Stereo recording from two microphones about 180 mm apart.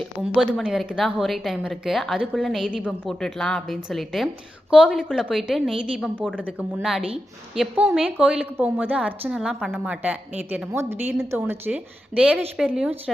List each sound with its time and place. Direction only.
0.0 s a woman's voice: centre (ahead or behind)